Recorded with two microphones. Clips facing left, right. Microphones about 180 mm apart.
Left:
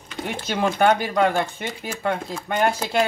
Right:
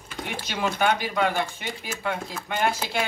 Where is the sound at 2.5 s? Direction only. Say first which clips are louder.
Left 4 dB; 45° left (ahead or behind).